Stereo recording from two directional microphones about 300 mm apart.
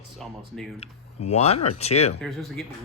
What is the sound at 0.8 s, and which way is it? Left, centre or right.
Speech, left.